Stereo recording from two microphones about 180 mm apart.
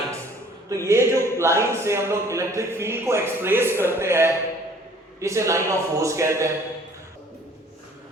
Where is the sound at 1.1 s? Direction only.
15° left (ahead or behind).